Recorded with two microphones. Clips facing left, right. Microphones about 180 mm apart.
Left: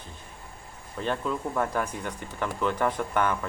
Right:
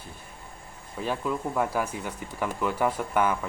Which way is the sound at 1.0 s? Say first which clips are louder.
Even; 5° right (ahead or behind).